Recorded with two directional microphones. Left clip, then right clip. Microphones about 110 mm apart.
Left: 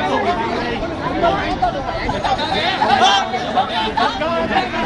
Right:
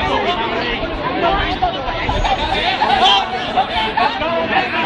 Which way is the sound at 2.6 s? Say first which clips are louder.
Right 1 dB; 20° left (ahead or behind).